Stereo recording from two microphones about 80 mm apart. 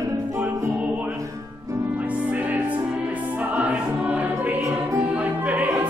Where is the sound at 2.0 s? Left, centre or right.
Centre.